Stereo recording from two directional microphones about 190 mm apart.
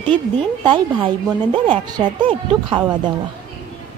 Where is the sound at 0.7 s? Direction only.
25° right (ahead or behind).